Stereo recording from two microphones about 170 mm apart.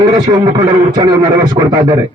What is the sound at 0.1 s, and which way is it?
Speech, 25° right (ahead or behind).